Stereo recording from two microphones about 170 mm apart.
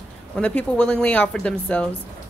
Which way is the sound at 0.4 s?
5° left (ahead or behind).